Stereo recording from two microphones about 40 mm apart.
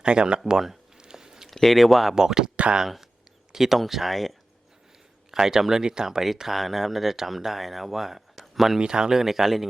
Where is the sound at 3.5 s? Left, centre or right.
Centre.